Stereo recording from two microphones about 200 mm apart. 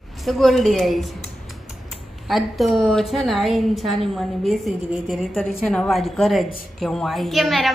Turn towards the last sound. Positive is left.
turn(degrees=0)  # may be behind; listen again after turning